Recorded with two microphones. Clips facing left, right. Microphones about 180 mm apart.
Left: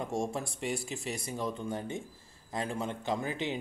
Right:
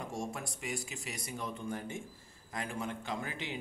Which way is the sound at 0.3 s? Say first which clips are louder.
Left 5 dB; 30° left (ahead or behind).